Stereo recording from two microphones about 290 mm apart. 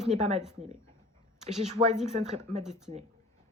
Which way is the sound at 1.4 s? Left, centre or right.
Right.